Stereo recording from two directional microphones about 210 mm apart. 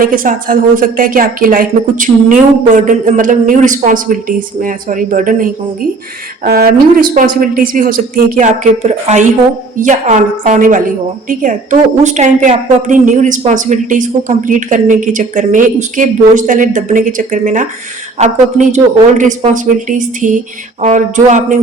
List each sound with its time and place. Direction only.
0.0 s a woman's voice: 40° right (ahead or behind)